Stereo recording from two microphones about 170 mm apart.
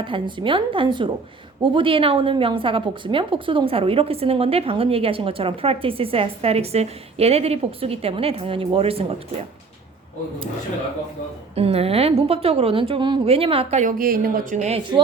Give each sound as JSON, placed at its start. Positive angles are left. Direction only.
{"t": 0.0, "sound": "a woman's voice", "side_deg": -30}
{"t": 11.5, "sound": "a woman's voice", "side_deg": -35}
{"t": 14.0, "sound": "speech", "side_deg": -60}